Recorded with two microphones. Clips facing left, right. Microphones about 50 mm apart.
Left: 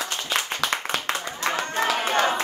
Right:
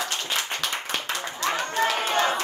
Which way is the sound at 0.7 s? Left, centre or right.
Left.